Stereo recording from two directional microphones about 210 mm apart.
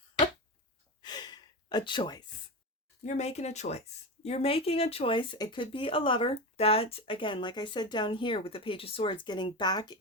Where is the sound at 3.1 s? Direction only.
30° left (ahead or behind).